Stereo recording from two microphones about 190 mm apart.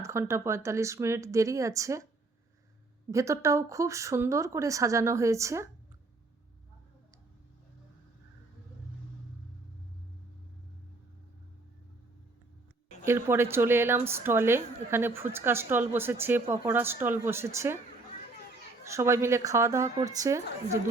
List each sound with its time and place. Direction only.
0.0 s a woman's voice: 15° right (ahead or behind)
3.1 s a woman's voice: 15° right (ahead or behind)
13.1 s a woman's voice: 10° right (ahead or behind)
18.9 s a woman's voice: 15° right (ahead or behind)